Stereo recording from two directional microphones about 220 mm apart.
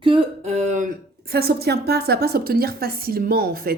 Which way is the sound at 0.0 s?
25° right (ahead or behind).